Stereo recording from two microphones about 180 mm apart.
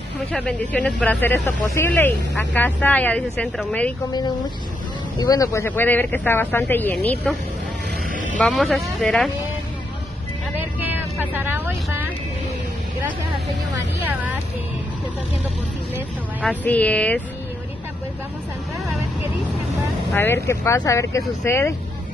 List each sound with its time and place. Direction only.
0.3 s speech: 5° left (ahead or behind)
5.2 s speech: 20° left (ahead or behind)
8.4 s speech: centre (ahead or behind)
10.8 s vehicle: 10° right (ahead or behind)
16.6 s speech: 10° left (ahead or behind)
20.1 s speech: 15° left (ahead or behind)